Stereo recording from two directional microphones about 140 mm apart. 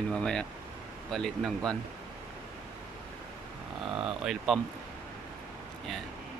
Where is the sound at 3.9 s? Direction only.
5° right (ahead or behind).